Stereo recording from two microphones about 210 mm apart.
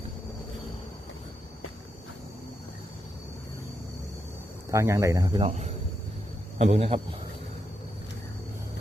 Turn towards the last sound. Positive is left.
turn(degrees=-30)  # may be behind; listen again after turning